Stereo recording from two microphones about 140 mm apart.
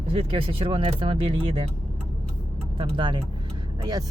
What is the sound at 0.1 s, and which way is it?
Speech, 40° right (ahead or behind).